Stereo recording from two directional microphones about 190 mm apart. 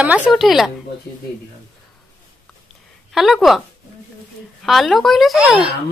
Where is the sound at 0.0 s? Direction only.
5° right (ahead or behind).